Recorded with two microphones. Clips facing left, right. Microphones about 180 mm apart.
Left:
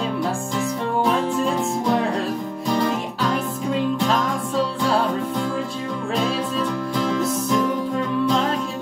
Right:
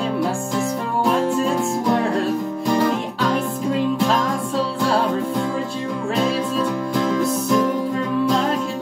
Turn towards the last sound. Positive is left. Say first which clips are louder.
# right 2 dB
turn(degrees=0)  # may be behind; listen again after turning